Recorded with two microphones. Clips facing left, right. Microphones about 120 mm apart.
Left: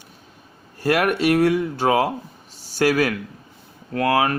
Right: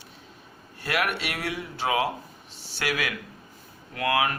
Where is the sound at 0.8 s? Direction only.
40° left (ahead or behind).